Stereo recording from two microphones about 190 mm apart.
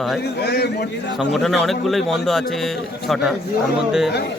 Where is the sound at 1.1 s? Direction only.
Centre (ahead or behind).